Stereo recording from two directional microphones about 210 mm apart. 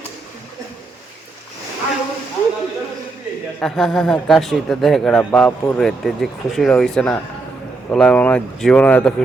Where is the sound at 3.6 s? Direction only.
Centre (ahead or behind).